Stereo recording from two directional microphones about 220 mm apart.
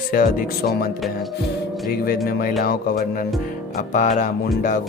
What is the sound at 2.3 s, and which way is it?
Speech, 40° left (ahead or behind).